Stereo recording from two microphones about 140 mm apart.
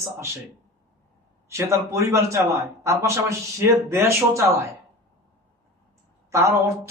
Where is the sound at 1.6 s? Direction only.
20° right (ahead or behind).